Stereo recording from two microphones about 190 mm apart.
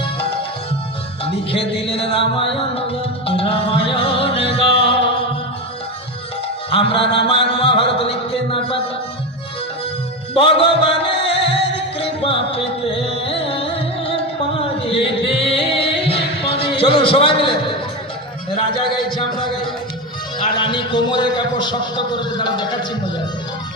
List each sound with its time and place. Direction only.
1.2 s a man's voice: 30° left (ahead or behind)
3.2 s music: 30° left (ahead or behind)
6.7 s a sound: 30° left (ahead or behind)
10.3 s music: 30° left (ahead or behind)
15.0 s singing: 30° left (ahead or behind)
18.5 s a sound: 25° left (ahead or behind)
20.4 s a man's voice: 25° left (ahead or behind)